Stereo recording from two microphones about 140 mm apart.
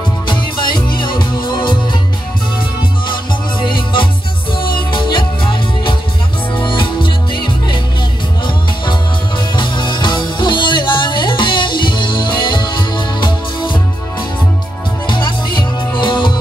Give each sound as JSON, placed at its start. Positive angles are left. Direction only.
{"t": 0.7, "sound": "music", "side_deg": 35}
{"t": 3.7, "sound": "music", "side_deg": 35}
{"t": 9.6, "sound": "music", "side_deg": 35}
{"t": 15.0, "sound": "music", "side_deg": 35}